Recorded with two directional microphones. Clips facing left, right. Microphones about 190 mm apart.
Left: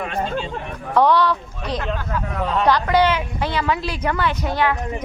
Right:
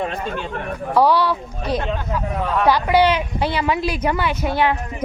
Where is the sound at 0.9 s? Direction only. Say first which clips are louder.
Even; 10° right (ahead or behind).